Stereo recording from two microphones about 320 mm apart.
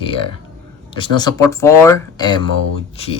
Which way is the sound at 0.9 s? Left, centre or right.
Centre.